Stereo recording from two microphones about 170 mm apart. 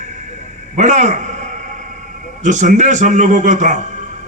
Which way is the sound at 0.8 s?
45° right (ahead or behind).